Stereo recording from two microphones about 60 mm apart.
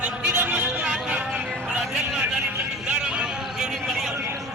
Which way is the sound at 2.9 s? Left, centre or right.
Centre.